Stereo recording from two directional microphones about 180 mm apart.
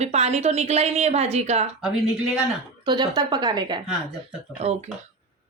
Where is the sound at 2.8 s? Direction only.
25° right (ahead or behind).